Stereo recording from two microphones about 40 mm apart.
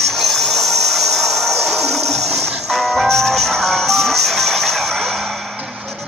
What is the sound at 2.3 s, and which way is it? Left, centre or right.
Music, centre.